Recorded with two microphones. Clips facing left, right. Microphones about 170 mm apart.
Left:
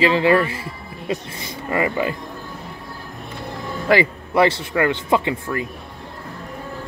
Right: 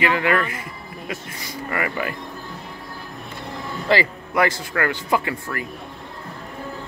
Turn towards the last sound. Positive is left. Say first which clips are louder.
# left 3 dB
turn(degrees=25)  # may be behind; listen again after turning